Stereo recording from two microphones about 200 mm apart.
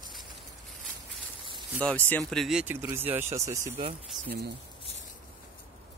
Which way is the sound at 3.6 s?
30° right (ahead or behind).